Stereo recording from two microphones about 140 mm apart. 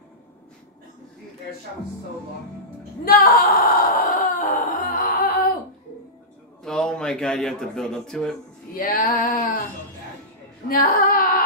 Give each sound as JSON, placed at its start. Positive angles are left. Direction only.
{"t": 3.1, "sound": "wail", "side_deg": 90}
{"t": 6.6, "sound": "a man's voice", "side_deg": 5}
{"t": 8.7, "sound": "female singing", "side_deg": 90}
{"t": 10.7, "sound": "female singing", "side_deg": 90}